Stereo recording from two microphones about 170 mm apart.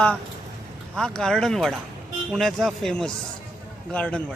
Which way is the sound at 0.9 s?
5° left (ahead or behind).